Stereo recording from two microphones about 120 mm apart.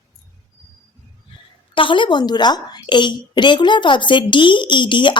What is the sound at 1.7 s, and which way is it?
A woman's voice, 45° left (ahead or behind).